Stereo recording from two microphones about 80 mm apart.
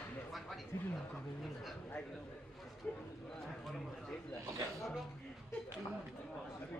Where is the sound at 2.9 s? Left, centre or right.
Centre.